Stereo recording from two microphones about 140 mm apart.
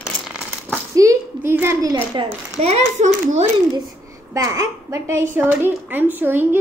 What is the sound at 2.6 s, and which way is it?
Speech, 50° right (ahead or behind).